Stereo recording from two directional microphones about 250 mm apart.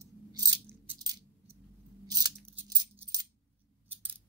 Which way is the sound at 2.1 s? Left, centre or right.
Centre.